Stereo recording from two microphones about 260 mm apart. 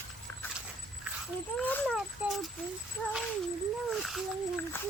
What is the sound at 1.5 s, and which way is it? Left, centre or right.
Speech, centre.